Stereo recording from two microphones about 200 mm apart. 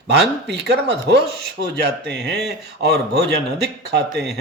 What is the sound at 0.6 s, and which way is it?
Speech, 55° right (ahead or behind).